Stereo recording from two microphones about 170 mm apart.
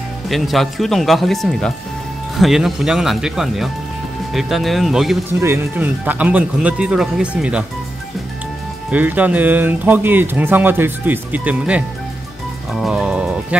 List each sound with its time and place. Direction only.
0.3 s speech: centre (ahead or behind)
5.4 s speech: 10° right (ahead or behind)
8.9 s speech: 10° right (ahead or behind)
12.7 s music: 5° right (ahead or behind)